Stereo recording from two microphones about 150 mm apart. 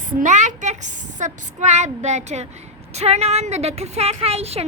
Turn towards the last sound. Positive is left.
turn(degrees=-45)  # may be behind; listen again after turning